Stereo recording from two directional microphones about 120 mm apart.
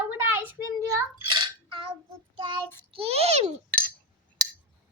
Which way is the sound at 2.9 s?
55° right (ahead or behind).